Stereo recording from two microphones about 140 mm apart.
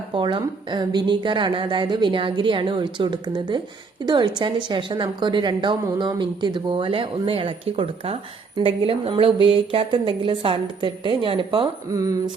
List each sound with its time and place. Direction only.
0.1 s a woman's voice: 35° right (ahead or behind)
11.9 s speech: 25° right (ahead or behind)